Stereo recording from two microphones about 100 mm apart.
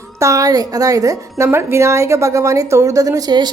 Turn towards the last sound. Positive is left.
turn(degrees=-45)  # may be behind; listen again after turning